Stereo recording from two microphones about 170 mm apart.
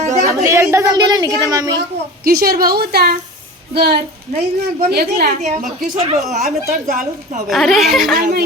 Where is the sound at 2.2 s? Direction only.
65° right (ahead or behind).